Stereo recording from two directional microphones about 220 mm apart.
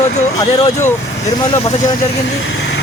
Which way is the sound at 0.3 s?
15° left (ahead or behind).